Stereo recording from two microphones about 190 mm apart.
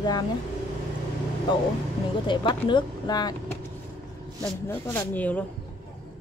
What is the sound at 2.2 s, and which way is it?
Speech, 25° left (ahead or behind).